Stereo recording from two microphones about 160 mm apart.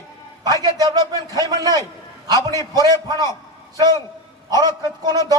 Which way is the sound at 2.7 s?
25° right (ahead or behind).